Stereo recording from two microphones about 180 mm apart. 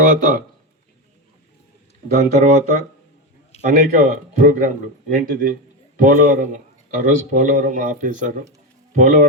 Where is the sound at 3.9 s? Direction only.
45° right (ahead or behind).